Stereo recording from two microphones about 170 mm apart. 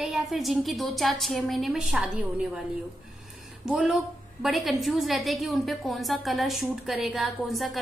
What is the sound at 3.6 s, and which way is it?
A woman's voice, 5° right (ahead or behind).